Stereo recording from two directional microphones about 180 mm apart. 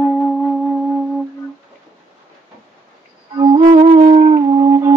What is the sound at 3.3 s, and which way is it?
Music, 25° right (ahead or behind).